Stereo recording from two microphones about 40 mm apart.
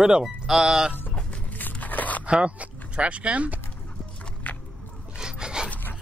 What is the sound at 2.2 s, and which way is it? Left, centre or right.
Speech, right.